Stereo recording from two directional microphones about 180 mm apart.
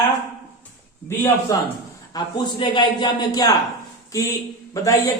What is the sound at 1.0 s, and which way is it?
A man's voice, 15° left (ahead or behind).